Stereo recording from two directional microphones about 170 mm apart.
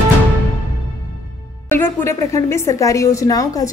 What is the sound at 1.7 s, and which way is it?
A woman's voice, 15° left (ahead or behind).